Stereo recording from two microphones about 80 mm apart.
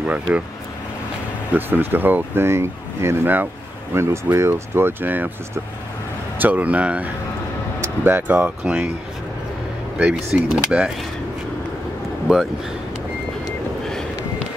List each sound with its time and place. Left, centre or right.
1.5 s speech: right
6.3 s speech: right
10.0 s speech: centre
12.3 s speech: centre